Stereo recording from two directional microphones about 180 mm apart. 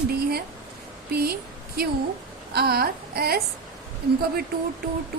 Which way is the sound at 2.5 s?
60° right (ahead or behind).